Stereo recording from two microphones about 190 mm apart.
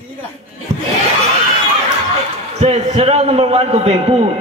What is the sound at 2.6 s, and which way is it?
A man's voice, 35° right (ahead or behind).